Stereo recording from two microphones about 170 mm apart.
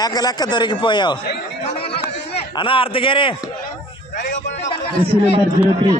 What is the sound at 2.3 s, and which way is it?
A man's voice, 30° left (ahead or behind).